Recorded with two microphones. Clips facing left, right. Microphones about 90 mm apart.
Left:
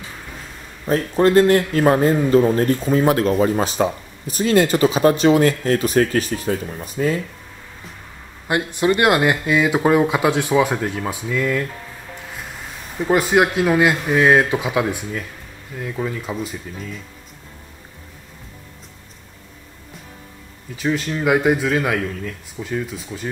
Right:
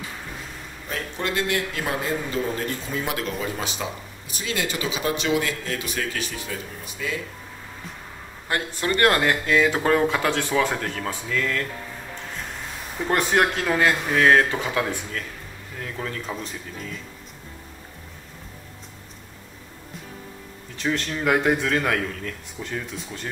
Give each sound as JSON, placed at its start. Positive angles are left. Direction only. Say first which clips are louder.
{"t": 0.8, "sound": "a man's voice", "louder": "left 13 dB", "side_deg": 40}
{"t": 8.5, "sound": "speech", "louder": "left 7 dB", "side_deg": 15}
{"t": 12.9, "sound": "speech", "louder": "left 5 dB", "side_deg": 5}
{"t": 20.7, "sound": "a man's voice", "louder": "left 4 dB", "side_deg": 5}